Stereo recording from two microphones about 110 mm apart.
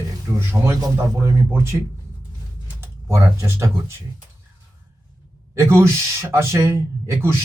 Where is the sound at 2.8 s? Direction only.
25° right (ahead or behind).